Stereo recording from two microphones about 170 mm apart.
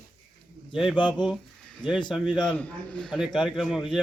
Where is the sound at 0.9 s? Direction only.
30° left (ahead or behind).